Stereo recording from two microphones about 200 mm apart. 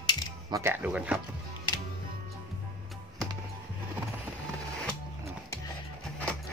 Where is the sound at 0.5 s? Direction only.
15° right (ahead or behind).